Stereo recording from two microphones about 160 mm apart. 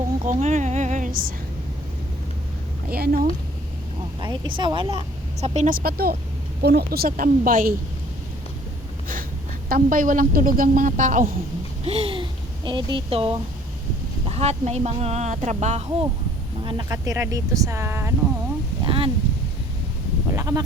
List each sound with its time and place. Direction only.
0.3 s a sound: 50° right (ahead or behind)
2.9 s a woman's voice: 65° right (ahead or behind)
4.2 s speech: 30° right (ahead or behind); by 5.7 s 45° right (ahead or behind)
5.7 s a woman's voice: 70° right (ahead or behind)
6.6 s a woman's voice: 90° right; by 7.7 s 60° right (ahead or behind)
9.6 s a woman's voice: 60° right (ahead or behind)
11.9 s a sound: 35° right (ahead or behind)
12.6 s speech: 30° right (ahead or behind); by 16.0 s 45° right (ahead or behind)
16.6 s speech: 25° right (ahead or behind)
18.9 s a sound: 35° right (ahead or behind)
20.3 s sheep: 20° right (ahead or behind)